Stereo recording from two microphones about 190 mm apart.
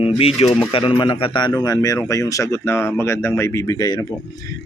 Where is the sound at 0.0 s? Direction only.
30° left (ahead or behind).